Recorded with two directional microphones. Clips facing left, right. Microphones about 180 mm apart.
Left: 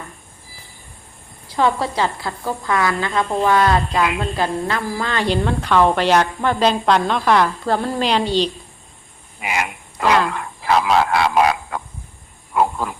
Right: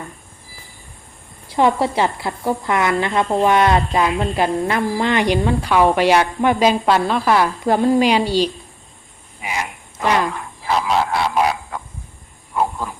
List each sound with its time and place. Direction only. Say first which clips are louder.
1.5 s a woman's voice: right 2 dB; 20° right (ahead or behind)
9.4 s frog: left 2 dB; 70° left (ahead or behind)
10.3 s a sound: left 3 dB; 70° left (ahead or behind)